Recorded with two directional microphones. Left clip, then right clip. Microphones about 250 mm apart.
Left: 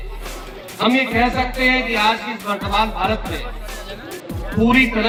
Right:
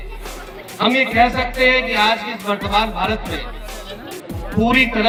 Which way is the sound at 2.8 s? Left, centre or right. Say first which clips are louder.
Even; right.